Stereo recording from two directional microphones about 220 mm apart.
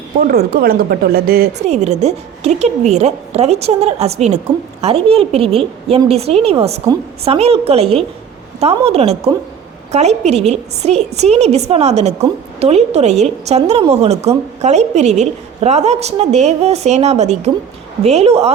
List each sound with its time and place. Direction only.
0.2 s a woman's voice: 45° right (ahead or behind)
1.6 s a woman's voice: 30° right (ahead or behind)